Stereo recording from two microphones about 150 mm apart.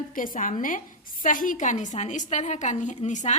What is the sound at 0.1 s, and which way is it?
A woman's voice, 65° left (ahead or behind).